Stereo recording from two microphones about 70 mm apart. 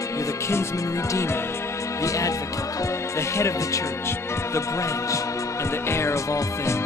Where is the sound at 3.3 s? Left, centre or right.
Left.